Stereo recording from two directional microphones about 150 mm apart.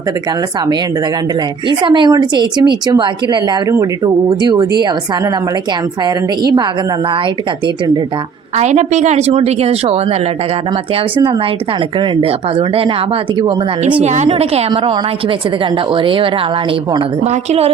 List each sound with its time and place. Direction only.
1.6 s speech: 30° right (ahead or behind)
8.5 s speech: 50° right (ahead or behind)
11.9 s a woman's voice: 35° right (ahead or behind)
14.0 s speech: 50° right (ahead or behind)
14.3 s a woman's voice: 40° right (ahead or behind)